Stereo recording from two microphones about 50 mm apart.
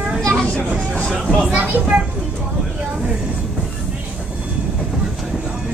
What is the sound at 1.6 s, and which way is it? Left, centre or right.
Speech, right.